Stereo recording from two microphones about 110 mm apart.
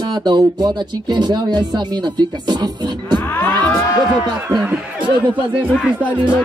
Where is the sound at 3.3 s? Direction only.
20° left (ahead or behind).